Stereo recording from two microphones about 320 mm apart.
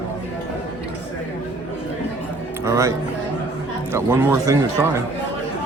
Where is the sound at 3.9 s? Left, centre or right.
Centre.